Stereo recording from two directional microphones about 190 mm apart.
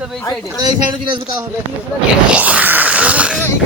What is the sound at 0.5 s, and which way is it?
Speech, 20° right (ahead or behind).